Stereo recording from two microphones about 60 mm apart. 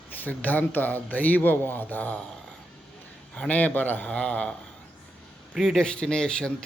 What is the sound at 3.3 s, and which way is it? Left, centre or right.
A man's voice, left.